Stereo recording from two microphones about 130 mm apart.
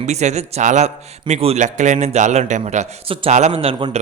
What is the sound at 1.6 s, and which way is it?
A man's voice, 65° right (ahead or behind).